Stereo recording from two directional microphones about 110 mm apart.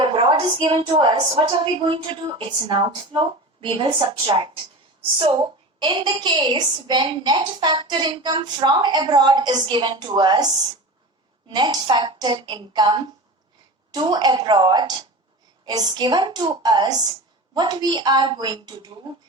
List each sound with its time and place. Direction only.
0.0 s a woman's voice: 50° right (ahead or behind)